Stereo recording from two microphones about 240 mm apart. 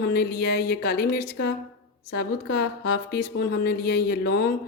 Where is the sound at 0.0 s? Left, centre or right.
Left.